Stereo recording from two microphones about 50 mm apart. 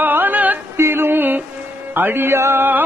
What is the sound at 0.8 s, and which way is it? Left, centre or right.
Music, right.